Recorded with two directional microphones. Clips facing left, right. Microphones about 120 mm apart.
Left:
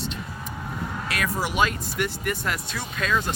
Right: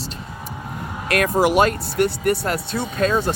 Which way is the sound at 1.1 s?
55° right (ahead or behind).